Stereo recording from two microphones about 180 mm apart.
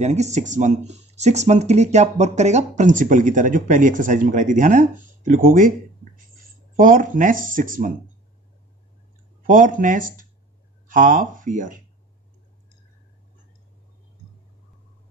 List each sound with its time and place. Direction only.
0.0 s speech: 40° right (ahead or behind)
6.8 s speech: 50° right (ahead or behind)
9.4 s speech: 50° right (ahead or behind)